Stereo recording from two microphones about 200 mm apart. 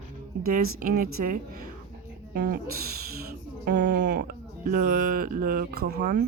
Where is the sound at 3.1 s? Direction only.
50° right (ahead or behind).